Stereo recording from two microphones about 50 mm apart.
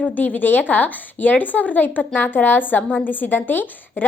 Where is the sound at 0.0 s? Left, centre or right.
Left.